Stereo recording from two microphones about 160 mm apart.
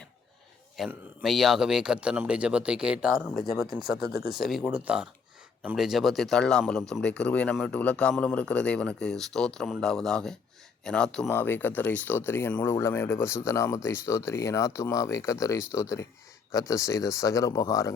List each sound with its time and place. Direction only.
0.8 s a man's voice: centre (ahead or behind)
3.2 s speech: 10° left (ahead or behind)
3.8 s a man's voice: 5° right (ahead or behind); by 17.9 s 20° left (ahead or behind)